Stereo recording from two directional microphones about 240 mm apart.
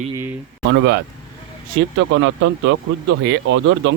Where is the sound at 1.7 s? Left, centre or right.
Right.